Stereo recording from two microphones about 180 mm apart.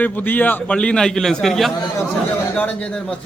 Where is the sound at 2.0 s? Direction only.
10° left (ahead or behind).